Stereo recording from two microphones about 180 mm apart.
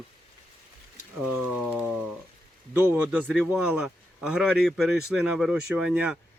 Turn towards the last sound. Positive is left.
turn(degrees=-5)  # may be behind; listen again after turning